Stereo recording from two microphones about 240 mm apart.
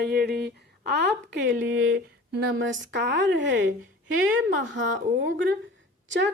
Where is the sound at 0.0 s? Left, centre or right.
Right.